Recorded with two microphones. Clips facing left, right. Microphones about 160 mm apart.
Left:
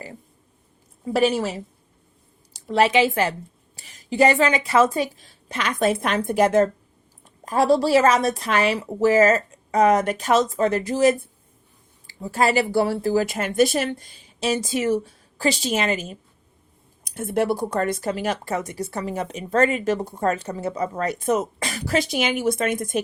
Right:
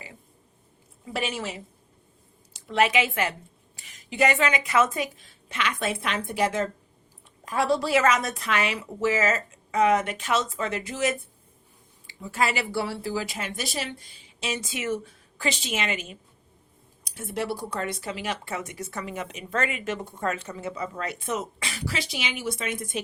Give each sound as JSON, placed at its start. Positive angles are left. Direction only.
{"t": 1.0, "sound": "a woman's voice", "side_deg": 40}
{"t": 14.3, "sound": "a woman's voice", "side_deg": 35}
{"t": 17.0, "sound": "speech", "side_deg": 50}